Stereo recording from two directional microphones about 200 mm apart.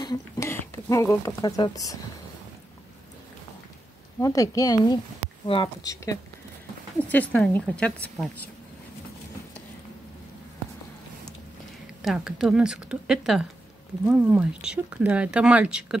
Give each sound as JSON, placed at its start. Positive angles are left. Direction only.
{"t": 0.0, "sound": "speech", "side_deg": 15}
{"t": 4.2, "sound": "a woman's voice", "side_deg": 15}
{"t": 12.0, "sound": "speech", "side_deg": 0}